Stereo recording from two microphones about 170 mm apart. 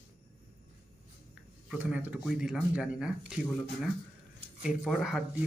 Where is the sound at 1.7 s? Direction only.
10° right (ahead or behind).